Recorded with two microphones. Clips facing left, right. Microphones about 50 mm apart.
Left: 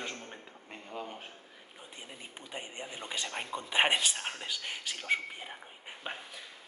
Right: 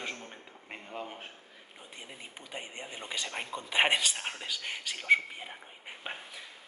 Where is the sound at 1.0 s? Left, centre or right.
Right.